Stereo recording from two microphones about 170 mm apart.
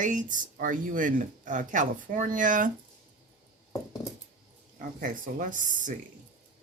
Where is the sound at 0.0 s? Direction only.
50° right (ahead or behind).